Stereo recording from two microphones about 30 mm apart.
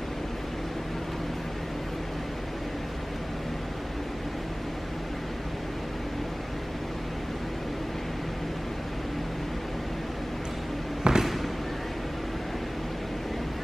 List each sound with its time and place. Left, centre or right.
11.1 s basketball bounce: right